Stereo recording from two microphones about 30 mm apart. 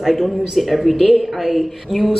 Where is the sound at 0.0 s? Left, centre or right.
Centre.